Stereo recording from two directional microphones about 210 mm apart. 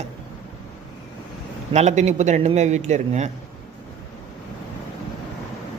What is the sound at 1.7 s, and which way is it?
A man's voice, 35° right (ahead or behind).